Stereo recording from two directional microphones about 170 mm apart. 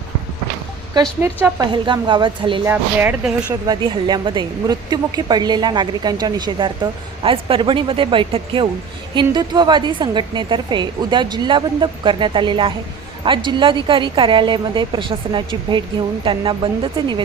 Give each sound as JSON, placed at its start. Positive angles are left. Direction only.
{"t": 1.2, "sound": "speech", "side_deg": -15}
{"t": 1.7, "sound": "a woman's voice", "side_deg": -30}
{"t": 2.6, "sound": "speech", "side_deg": -10}
{"t": 3.7, "sound": "a woman's voice", "side_deg": -25}